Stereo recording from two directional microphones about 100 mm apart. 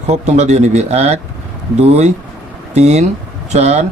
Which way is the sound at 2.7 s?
90° right.